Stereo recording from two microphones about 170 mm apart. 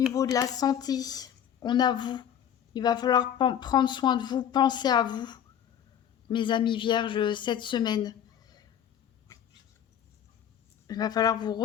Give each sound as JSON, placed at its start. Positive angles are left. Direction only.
{"t": 0.1, "sound": "a woman's voice", "side_deg": 20}
{"t": 10.8, "sound": "a woman's voice", "side_deg": 25}